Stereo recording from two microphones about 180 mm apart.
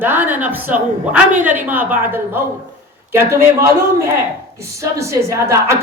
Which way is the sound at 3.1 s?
15° right (ahead or behind).